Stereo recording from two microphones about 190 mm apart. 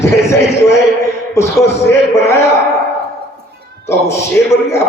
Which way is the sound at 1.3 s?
15° left (ahead or behind).